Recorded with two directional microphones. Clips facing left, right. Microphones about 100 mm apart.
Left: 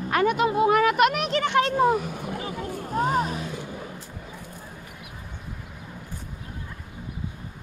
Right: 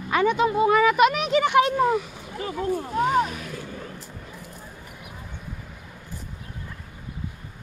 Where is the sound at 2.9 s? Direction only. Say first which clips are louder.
Even; 35° left (ahead or behind).